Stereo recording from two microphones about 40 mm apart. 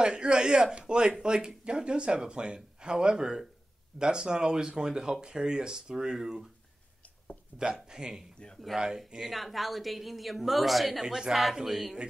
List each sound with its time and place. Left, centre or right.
0.0 s speech: right
7.5 s speech: centre
8.4 s speech: left
8.7 s speech: centre
9.3 s speech: centre
11.1 s speech: centre